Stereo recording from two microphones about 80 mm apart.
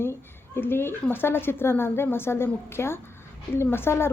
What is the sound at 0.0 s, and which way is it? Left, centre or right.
A woman's voice, left.